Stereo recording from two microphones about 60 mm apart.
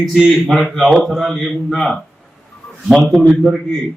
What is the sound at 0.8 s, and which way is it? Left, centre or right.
Speech, centre.